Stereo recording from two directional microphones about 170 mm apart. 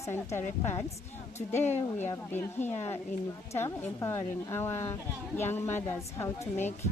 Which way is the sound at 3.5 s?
15° left (ahead or behind).